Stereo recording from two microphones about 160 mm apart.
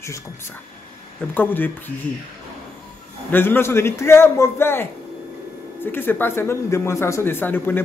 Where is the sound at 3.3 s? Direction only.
15° left (ahead or behind).